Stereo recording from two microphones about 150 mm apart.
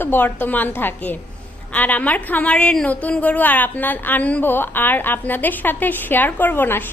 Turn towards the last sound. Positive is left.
turn(degrees=15)  # may be behind; listen again after turning